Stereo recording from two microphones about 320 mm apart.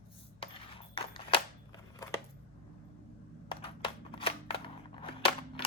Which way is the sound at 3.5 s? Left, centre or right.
Centre.